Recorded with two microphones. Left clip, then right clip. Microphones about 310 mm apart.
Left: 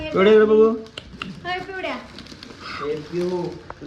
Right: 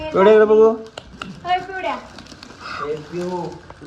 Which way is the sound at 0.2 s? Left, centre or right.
Right.